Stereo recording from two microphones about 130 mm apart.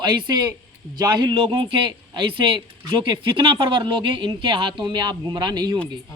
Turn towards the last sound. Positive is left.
turn(degrees=-30)  # may be behind; listen again after turning